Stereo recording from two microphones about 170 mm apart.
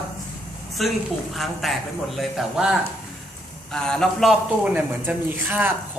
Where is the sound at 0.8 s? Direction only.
Centre (ahead or behind).